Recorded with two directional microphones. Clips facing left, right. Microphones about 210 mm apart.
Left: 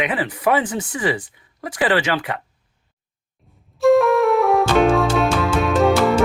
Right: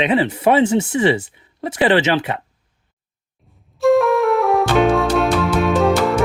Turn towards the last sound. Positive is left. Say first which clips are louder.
# even
turn(degrees=0)  # may be behind; listen again after turning